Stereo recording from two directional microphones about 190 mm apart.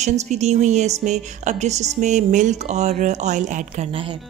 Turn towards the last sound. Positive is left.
turn(degrees=-30)  # may be behind; listen again after turning